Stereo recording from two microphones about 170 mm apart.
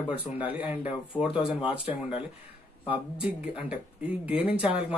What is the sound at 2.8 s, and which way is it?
Speech, 10° right (ahead or behind).